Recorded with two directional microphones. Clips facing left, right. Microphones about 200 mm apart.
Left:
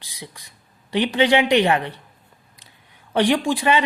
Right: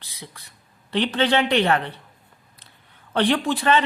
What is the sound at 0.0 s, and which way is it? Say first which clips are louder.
Speech: left 3 dB; 15° left (ahead or behind).